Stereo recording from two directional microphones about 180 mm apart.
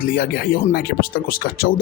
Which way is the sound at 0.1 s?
50° left (ahead or behind).